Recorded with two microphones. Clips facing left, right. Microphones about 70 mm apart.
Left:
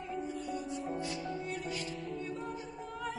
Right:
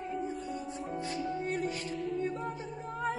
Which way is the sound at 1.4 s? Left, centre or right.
Right.